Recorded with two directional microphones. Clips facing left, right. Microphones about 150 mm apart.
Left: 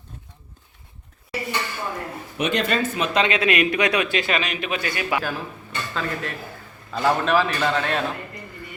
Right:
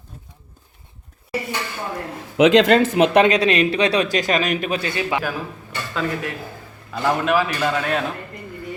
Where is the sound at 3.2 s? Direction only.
40° right (ahead or behind).